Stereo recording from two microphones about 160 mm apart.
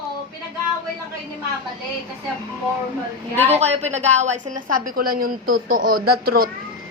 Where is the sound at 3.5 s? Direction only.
45° right (ahead or behind); by 6.5 s 70° right (ahead or behind).